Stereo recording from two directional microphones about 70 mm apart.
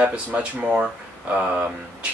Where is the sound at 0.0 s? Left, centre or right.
Centre.